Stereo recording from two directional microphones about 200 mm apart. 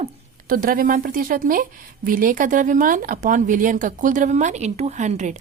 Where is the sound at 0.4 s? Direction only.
45° right (ahead or behind).